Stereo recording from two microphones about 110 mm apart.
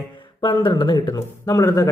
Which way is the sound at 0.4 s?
40° left (ahead or behind).